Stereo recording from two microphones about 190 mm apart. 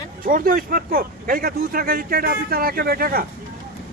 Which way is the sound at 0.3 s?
45° right (ahead or behind).